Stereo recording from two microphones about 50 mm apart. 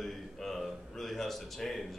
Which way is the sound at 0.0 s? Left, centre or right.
Centre.